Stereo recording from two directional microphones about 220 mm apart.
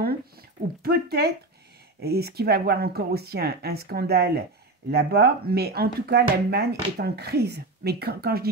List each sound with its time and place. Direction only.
0.8 s speech: 45° right (ahead or behind)